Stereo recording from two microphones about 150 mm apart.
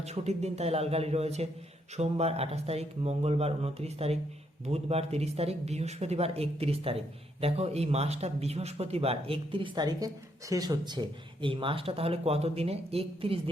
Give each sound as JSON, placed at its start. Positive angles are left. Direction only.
{"t": 0.0, "sound": "a man's voice", "side_deg": -45}